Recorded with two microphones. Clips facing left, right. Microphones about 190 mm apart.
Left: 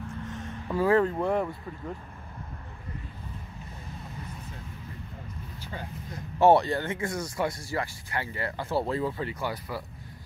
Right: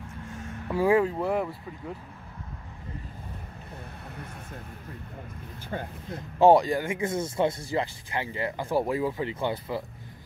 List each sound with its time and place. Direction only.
0.3 s speech: 10° right (ahead or behind)
3.9 s vehicle: 60° right (ahead or behind)
5.6 s speech: 55° right (ahead or behind)
6.4 s speech: 10° right (ahead or behind)
9.3 s speech: 25° right (ahead or behind)